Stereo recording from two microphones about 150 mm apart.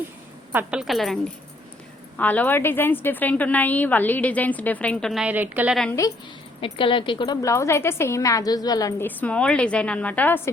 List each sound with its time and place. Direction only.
0.5 s a woman's voice: 5° right (ahead or behind)
2.1 s a woman's voice: 10° left (ahead or behind)
5.2 s a woman's voice: 10° right (ahead or behind)
5.7 s a woman's voice: 5° left (ahead or behind)
6.6 s a woman's voice: 35° left (ahead or behind)
9.0 s a woman's voice: 10° left (ahead or behind)